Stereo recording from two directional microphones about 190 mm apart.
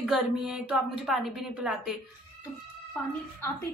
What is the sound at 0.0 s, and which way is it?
A woman's voice, centre (ahead or behind).